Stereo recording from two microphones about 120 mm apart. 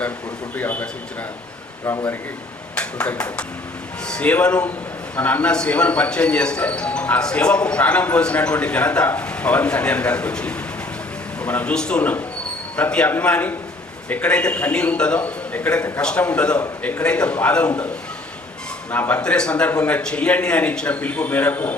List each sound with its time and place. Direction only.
0.5 s speech: 15° left (ahead or behind)
2.7 s speech: 10° left (ahead or behind)
18.9 s speech: 15° left (ahead or behind)